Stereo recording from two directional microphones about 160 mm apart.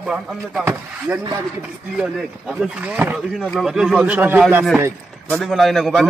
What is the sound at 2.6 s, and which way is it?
Speech, 10° right (ahead or behind).